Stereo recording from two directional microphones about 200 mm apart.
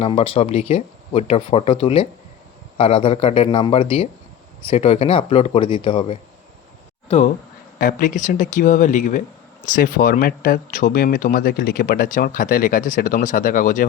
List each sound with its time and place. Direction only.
0.0 s speech: 30° left (ahead or behind)
7.8 s speech: 45° left (ahead or behind)